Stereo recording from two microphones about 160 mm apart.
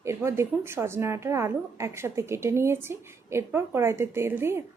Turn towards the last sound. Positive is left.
turn(degrees=-15)  # may be behind; listen again after turning